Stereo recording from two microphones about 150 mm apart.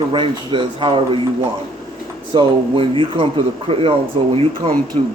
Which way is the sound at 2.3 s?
35° right (ahead or behind).